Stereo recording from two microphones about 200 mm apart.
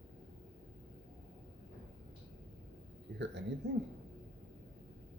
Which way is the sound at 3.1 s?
55° right (ahead or behind).